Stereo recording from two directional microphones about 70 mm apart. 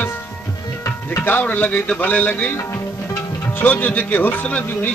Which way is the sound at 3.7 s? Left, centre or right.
Left.